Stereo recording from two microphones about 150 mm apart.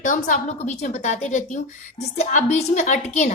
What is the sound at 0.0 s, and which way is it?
A woman's voice, 60° left (ahead or behind).